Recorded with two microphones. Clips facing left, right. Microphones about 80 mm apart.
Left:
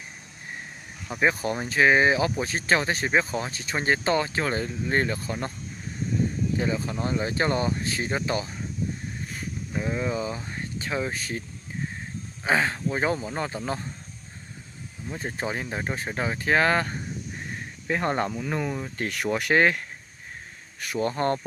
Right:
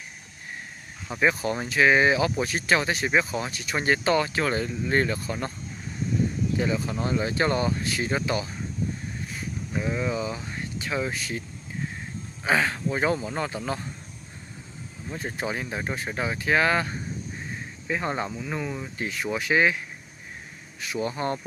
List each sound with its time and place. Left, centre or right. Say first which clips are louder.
1.2 s speech: even; left
6.6 s speech: right 2 dB; left
9.8 s speech: even; left
12.4 s speech: even; left
15.1 s speech: even; left
19.3 s speech: left 1 dB; left
20.8 s speech: left 2 dB; left